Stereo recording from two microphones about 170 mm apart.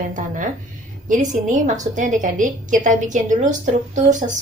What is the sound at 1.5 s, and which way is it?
A woman's voice, 50° right (ahead or behind).